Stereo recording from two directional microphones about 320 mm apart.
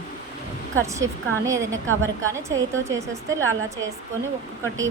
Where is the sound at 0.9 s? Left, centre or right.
Centre.